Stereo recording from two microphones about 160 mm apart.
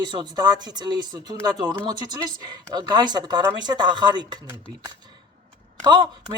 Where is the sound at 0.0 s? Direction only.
25° right (ahead or behind).